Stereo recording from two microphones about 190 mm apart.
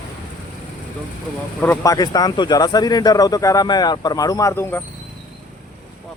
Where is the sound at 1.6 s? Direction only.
15° left (ahead or behind).